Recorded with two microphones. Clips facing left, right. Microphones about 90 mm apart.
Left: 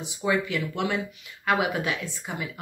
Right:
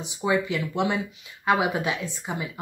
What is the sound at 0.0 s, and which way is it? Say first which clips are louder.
A woman's voice: right 1 dB; 20° right (ahead or behind).